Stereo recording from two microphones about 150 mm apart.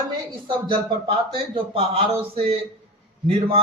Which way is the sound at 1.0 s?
40° right (ahead or behind).